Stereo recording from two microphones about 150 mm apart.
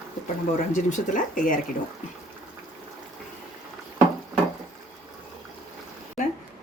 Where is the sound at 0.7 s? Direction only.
60° left (ahead or behind).